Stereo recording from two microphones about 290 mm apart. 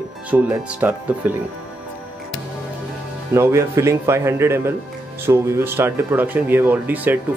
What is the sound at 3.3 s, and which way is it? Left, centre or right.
Speech, centre.